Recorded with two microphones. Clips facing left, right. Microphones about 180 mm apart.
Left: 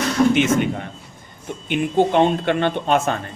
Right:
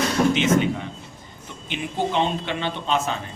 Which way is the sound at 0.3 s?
55° left (ahead or behind).